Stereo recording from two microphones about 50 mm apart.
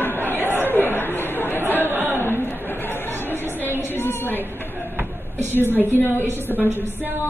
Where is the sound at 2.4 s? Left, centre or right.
Left.